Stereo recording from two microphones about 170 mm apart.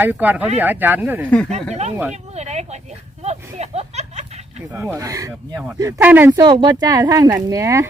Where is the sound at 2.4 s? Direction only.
40° right (ahead or behind).